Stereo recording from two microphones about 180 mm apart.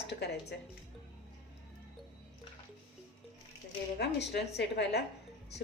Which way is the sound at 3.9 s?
70° left (ahead or behind).